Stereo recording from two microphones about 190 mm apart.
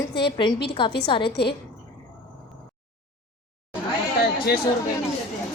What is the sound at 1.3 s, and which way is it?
Speech, 60° left (ahead or behind).